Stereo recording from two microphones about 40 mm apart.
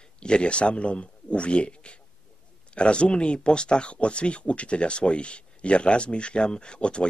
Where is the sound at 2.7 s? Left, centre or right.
Left.